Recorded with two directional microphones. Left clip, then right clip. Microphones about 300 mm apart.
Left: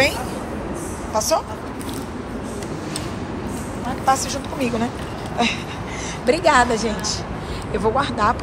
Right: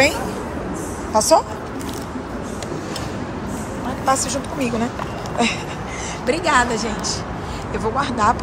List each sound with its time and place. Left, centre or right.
1.1 s a woman's voice: centre
4.0 s a woman's voice: centre